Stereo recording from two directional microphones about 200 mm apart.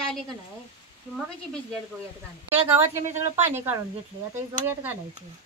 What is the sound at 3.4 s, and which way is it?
Speech, 10° right (ahead or behind).